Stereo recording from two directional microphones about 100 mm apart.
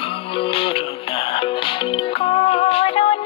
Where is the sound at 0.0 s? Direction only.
65° left (ahead or behind).